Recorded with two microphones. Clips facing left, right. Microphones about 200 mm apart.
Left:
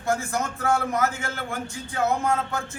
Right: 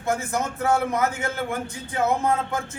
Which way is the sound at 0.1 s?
20° right (ahead or behind).